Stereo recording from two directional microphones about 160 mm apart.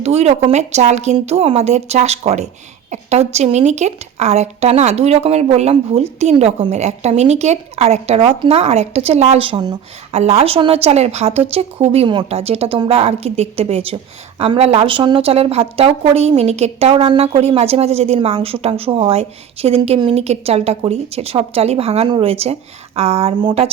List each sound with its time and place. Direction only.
0.0 s a woman's voice: 40° right (ahead or behind)